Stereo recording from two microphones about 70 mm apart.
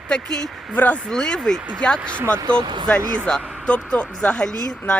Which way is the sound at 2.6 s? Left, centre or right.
Right.